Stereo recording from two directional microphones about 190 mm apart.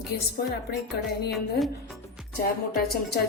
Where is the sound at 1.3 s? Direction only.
Centre (ahead or behind).